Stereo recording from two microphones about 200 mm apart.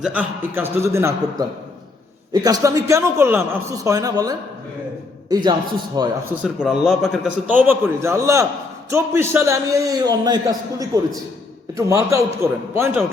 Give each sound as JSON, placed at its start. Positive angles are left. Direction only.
{"t": 0.0, "sound": "a man's voice", "side_deg": -5}
{"t": 6.0, "sound": "a man's voice", "side_deg": -10}